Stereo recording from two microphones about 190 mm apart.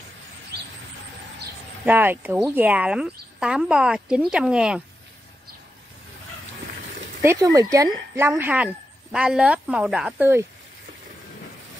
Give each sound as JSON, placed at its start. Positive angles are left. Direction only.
{"t": 1.9, "sound": "speech", "side_deg": -10}
{"t": 7.2, "sound": "speech", "side_deg": -15}